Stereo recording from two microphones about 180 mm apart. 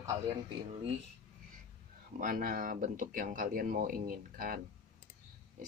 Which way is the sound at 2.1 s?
50° right (ahead or behind).